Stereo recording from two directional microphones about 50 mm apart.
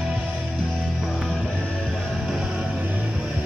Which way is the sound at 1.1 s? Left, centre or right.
Centre.